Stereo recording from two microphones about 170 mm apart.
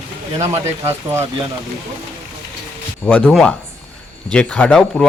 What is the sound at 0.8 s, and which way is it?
Speech, 15° right (ahead or behind).